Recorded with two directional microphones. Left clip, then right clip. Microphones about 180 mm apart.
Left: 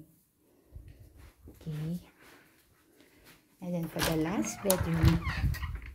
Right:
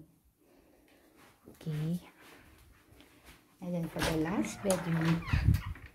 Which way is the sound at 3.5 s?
5° left (ahead or behind).